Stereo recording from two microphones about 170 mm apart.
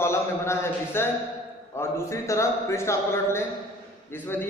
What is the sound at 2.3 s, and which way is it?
A man's voice, 15° left (ahead or behind).